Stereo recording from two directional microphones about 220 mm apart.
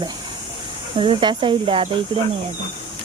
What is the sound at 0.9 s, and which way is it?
Speech, 25° right (ahead or behind).